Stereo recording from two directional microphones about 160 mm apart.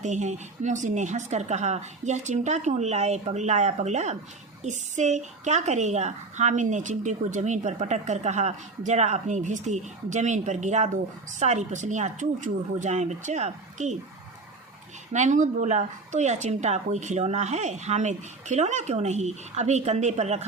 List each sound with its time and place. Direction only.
0.0 s a woman's voice: 45° right (ahead or behind)
15.1 s a woman's voice: 50° right (ahead or behind)